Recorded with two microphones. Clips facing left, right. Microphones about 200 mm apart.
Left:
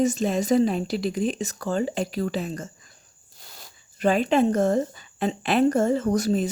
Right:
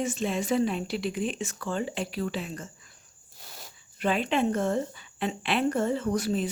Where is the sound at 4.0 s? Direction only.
40° left (ahead or behind).